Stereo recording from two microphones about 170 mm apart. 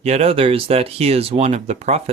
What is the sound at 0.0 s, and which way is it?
Speech, 35° right (ahead or behind).